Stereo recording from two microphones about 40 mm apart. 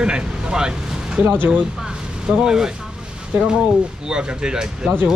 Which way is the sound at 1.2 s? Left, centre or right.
Right.